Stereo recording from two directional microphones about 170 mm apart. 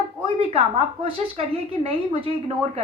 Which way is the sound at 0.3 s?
35° right (ahead or behind).